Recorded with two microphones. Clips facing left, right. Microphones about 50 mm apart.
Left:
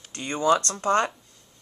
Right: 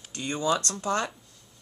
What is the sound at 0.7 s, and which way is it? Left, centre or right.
Speech, left.